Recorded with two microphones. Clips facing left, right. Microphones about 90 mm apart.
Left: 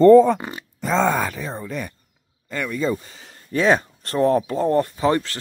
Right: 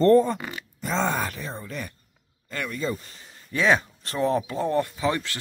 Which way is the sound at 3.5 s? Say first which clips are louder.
Left 4 dB; 40° left (ahead or behind).